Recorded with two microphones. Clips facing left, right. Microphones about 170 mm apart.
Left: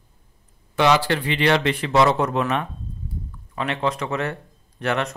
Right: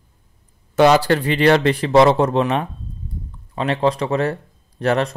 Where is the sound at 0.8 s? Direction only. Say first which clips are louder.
Right 5 dB; 45° right (ahead or behind).